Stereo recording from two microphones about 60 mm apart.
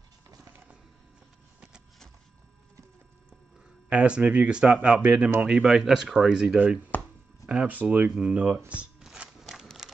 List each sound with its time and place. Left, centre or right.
3.9 s speech: centre
5.7 s speech: centre
7.4 s speech: right
9.4 s a sound: centre